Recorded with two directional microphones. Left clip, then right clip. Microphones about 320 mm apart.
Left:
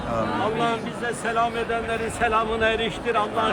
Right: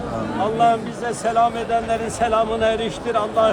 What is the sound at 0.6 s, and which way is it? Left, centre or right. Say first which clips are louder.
Speech: right 7 dB; right.